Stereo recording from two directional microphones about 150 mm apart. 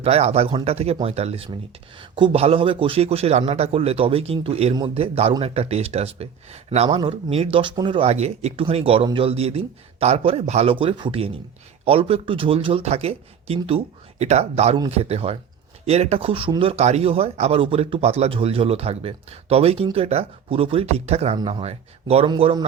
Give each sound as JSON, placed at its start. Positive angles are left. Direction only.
{"t": 0.0, "sound": "speech", "side_deg": -45}